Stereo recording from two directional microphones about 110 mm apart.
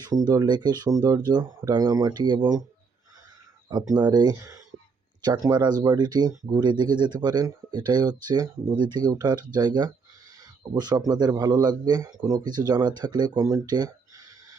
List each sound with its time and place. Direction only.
0.0 s speech: 40° right (ahead or behind)
3.8 s speech: 40° right (ahead or behind)